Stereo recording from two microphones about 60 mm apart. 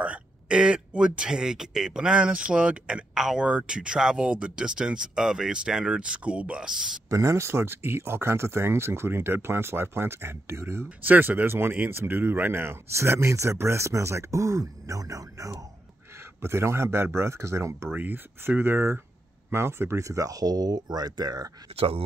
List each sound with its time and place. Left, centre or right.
0.0 s speech: centre
3.2 s speech: centre
7.1 s speech: right
11.1 s speech: right
12.9 s speech: right
16.3 s speech: right
17.9 s speech: right